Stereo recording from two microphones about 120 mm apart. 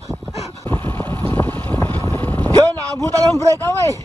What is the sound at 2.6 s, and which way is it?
A man's voice, 25° right (ahead or behind).